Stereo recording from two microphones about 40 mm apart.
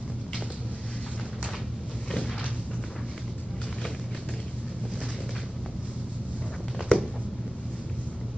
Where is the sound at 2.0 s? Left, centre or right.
Centre.